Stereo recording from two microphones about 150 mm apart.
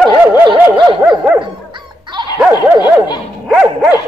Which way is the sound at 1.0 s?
5° right (ahead or behind).